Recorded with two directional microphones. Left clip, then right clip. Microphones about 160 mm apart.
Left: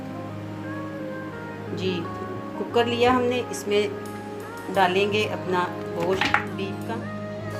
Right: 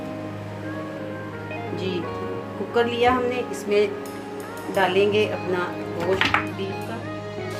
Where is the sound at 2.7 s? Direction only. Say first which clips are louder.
Even; 45° left (ahead or behind).